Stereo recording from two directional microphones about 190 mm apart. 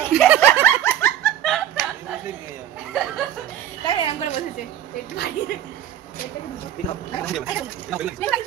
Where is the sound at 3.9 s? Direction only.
30° left (ahead or behind).